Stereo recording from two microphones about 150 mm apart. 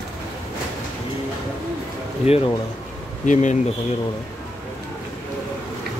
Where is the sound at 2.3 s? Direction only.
45° left (ahead or behind).